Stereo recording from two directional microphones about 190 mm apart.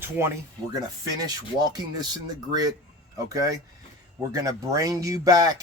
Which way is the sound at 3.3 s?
20° right (ahead or behind).